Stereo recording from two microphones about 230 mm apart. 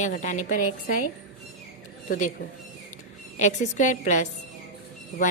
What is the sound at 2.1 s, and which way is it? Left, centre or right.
Speech, left.